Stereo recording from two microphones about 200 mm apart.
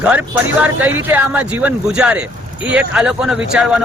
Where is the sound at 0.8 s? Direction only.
10° right (ahead or behind).